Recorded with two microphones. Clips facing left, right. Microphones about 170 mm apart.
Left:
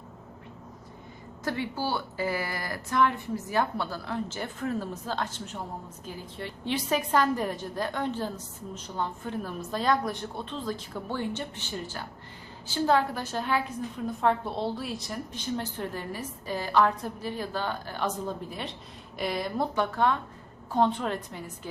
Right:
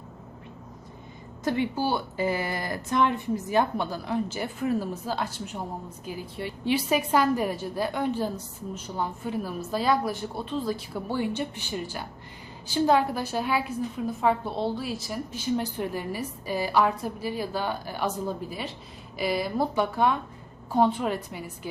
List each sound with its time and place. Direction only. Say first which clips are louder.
1.5 s a woman's voice: right 5 dB; 20° right (ahead or behind)